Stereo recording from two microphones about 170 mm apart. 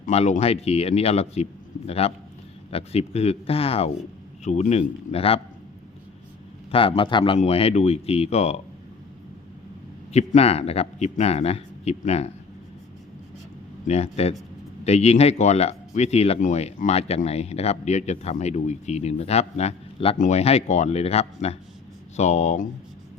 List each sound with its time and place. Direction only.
0.0 s speech: 40° left (ahead or behind)
6.7 s speech: 30° left (ahead or behind)
10.1 s speech: 40° left (ahead or behind)
13.8 s speech: 40° left (ahead or behind)